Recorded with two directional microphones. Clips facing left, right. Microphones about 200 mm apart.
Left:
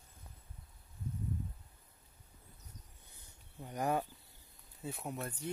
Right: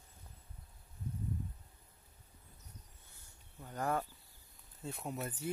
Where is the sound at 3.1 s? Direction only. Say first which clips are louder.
Left 4 dB; 15° left (ahead or behind).